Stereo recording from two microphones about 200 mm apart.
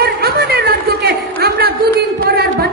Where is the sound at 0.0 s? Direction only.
50° right (ahead or behind).